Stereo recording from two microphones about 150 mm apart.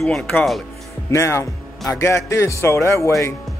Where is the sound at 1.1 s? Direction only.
20° left (ahead or behind).